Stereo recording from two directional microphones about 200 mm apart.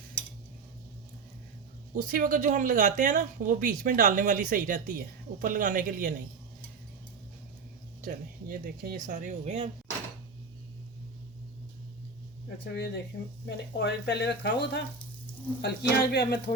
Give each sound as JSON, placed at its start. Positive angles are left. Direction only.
{"t": 2.0, "sound": "speech", "side_deg": -45}
{"t": 8.0, "sound": "speech", "side_deg": -45}
{"t": 12.6, "sound": "speech", "side_deg": 60}